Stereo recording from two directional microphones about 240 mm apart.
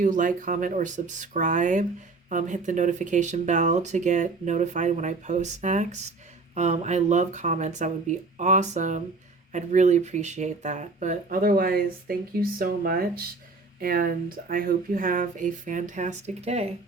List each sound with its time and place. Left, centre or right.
0.0 s speech: right